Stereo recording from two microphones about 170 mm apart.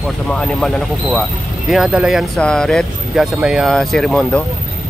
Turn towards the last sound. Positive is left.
turn(degrees=5)  # may be behind; listen again after turning